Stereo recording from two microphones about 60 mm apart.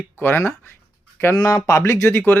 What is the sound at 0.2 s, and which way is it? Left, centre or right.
Speech, left.